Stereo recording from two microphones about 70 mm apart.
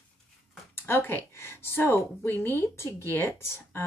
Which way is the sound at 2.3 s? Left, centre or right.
Right.